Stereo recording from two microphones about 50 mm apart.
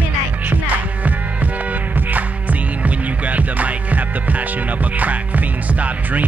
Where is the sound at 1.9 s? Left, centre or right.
Right.